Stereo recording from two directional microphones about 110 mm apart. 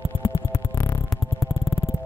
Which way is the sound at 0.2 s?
25° left (ahead or behind).